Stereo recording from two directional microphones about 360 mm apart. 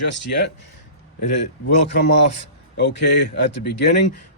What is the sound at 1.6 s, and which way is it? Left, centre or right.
Speech, left.